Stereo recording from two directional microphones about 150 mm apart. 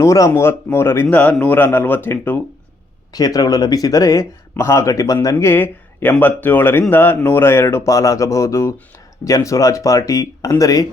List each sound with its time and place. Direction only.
0.0 s speech: 20° left (ahead or behind)
3.1 s speech: 25° left (ahead or behind)